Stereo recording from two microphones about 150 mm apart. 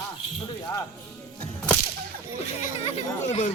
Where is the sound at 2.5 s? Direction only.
45° left (ahead or behind).